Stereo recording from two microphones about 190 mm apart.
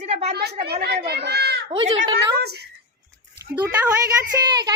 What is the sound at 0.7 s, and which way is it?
A child's voice, 55° right (ahead or behind).